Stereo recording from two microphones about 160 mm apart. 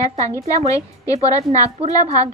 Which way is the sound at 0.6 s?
20° left (ahead or behind).